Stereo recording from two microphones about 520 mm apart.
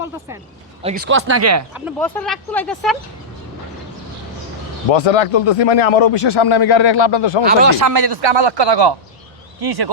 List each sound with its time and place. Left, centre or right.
0.8 s speech: centre
1.7 s speech: centre
4.9 s speech: left
6.2 s speech: left
7.8 s speech: right
8.1 s speech: right